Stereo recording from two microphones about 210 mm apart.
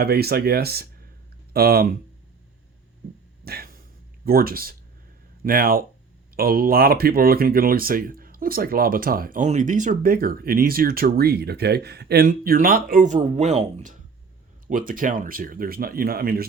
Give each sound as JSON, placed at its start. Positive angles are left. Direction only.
{"t": 0.0, "sound": "speech", "side_deg": -50}
{"t": 3.4, "sound": "a sound", "side_deg": -45}
{"t": 4.3, "sound": "speech", "side_deg": -45}